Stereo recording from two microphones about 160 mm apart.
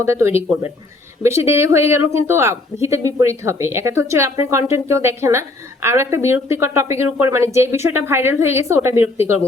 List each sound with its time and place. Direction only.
0.0 s speech: 15° right (ahead or behind)